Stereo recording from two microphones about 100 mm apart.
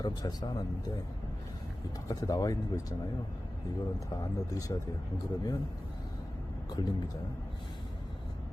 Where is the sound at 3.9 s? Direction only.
35° left (ahead or behind).